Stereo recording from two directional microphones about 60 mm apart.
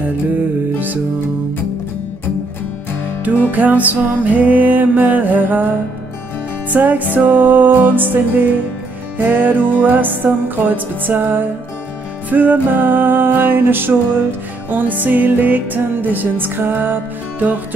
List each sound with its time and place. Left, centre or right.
3.5 s music: right
6.7 s music: right